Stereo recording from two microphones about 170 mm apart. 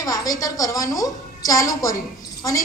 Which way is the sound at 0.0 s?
20° left (ahead or behind).